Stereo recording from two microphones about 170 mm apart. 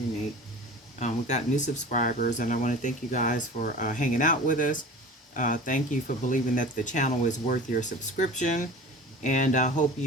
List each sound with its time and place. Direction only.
0.9 s speech: 45° left (ahead or behind)